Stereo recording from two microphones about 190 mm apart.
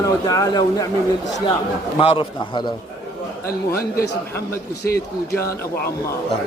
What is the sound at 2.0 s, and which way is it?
Speech, 30° left (ahead or behind).